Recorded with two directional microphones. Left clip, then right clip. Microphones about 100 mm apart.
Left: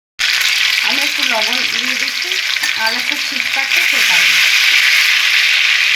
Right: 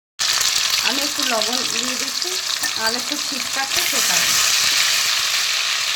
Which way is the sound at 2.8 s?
35° right (ahead or behind).